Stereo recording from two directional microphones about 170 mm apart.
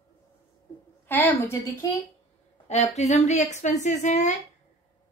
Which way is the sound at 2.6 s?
40° left (ahead or behind).